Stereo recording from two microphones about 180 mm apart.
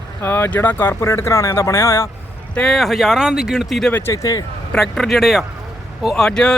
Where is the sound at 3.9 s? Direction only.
15° left (ahead or behind).